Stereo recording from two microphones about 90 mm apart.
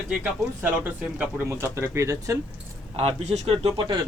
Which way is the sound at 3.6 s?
60° right (ahead or behind).